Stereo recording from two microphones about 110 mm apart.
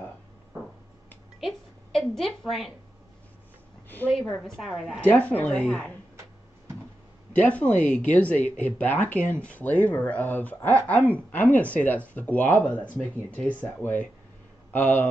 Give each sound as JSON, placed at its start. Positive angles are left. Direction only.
{"t": 1.4, "sound": "a sound", "side_deg": 5}
{"t": 4.1, "sound": "a woman's voice", "side_deg": 0}
{"t": 5.0, "sound": "speech", "side_deg": 15}
{"t": 7.3, "sound": "a man's voice", "side_deg": 10}